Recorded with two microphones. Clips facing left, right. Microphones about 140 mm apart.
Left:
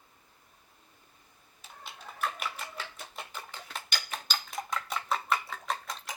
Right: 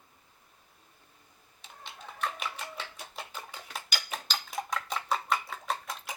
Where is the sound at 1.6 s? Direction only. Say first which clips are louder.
Even; 5° left (ahead or behind).